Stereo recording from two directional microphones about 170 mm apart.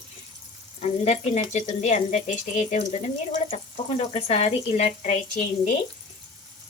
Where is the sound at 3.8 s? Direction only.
35° left (ahead or behind).